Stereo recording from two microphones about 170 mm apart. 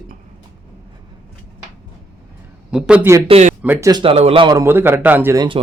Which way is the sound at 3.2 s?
40° right (ahead or behind).